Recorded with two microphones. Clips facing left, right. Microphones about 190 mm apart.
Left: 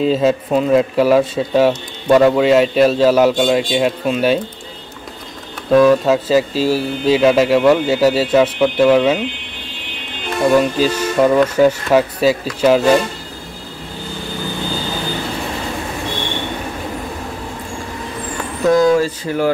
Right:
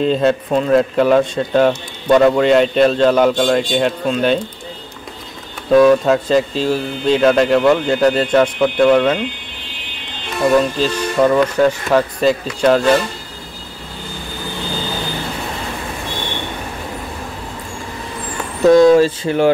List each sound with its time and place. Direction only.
0.0 s speech: 5° left (ahead or behind)
5.7 s speech: centre (ahead or behind)
10.6 s speech: 10° left (ahead or behind)
18.7 s speech: 30° right (ahead or behind)